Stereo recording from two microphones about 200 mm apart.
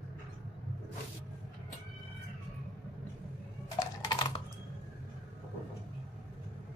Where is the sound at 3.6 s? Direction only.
20° left (ahead or behind).